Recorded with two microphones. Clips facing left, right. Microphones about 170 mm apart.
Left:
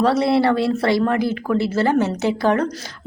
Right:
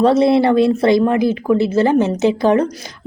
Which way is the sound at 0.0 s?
20° right (ahead or behind).